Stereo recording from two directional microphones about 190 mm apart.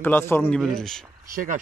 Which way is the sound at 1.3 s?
45° right (ahead or behind).